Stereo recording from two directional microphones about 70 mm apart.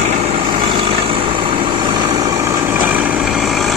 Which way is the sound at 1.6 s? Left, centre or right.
Right.